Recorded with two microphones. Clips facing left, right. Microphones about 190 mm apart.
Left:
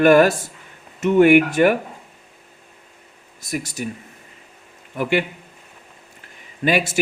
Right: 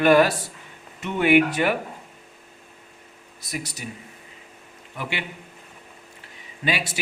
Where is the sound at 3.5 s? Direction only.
50° left (ahead or behind).